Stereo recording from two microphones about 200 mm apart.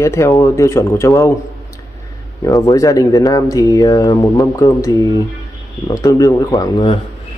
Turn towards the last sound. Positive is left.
turn(degrees=20)  # may be behind; listen again after turning